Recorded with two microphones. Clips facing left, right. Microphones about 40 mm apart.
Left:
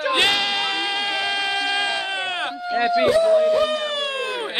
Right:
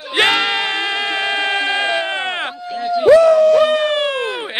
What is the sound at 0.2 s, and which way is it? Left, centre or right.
Music, right.